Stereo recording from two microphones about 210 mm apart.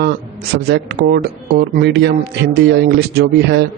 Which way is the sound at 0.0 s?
50° right (ahead or behind).